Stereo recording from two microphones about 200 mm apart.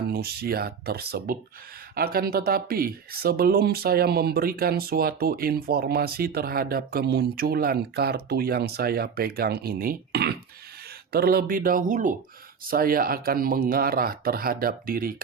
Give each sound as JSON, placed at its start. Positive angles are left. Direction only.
{"t": 0.1, "sound": "speech", "side_deg": -50}